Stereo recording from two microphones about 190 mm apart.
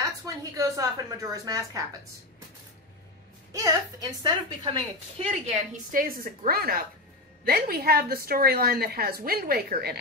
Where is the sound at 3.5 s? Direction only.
20° right (ahead or behind).